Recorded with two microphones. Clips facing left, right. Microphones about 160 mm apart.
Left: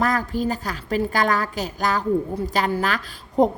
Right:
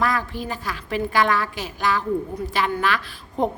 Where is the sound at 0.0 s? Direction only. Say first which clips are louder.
Left 3 dB; 40° left (ahead or behind).